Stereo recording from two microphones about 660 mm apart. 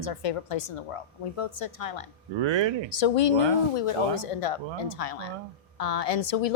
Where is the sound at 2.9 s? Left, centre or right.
Left.